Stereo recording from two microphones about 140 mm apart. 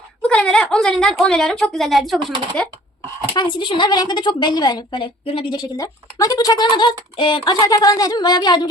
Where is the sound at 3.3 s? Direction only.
35° left (ahead or behind).